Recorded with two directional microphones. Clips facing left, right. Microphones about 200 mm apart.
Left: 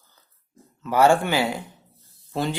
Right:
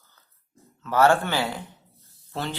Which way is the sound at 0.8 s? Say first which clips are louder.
Left 2 dB; 10° left (ahead or behind).